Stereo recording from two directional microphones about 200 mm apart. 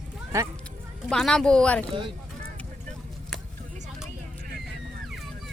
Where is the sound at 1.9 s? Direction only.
25° right (ahead or behind).